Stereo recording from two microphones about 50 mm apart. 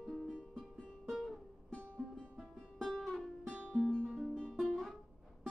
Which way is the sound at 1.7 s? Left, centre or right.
Left.